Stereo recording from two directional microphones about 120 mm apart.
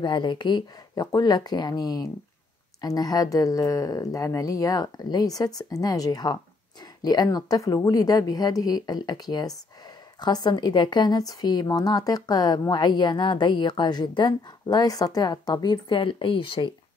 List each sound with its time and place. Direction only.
0.0 s a woman's voice: 40° left (ahead or behind)